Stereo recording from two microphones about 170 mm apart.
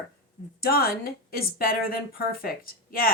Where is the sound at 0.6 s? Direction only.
65° left (ahead or behind).